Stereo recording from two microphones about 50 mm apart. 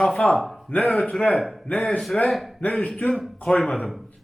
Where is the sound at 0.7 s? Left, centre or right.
Left.